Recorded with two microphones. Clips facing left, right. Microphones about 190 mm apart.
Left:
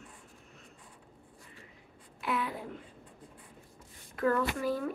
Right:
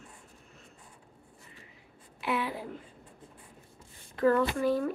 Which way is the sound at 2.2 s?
5° right (ahead or behind).